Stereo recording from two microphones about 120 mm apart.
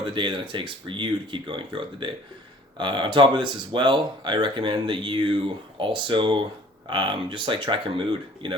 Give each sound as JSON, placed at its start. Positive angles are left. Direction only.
{"t": 0.0, "sound": "speech", "side_deg": -45}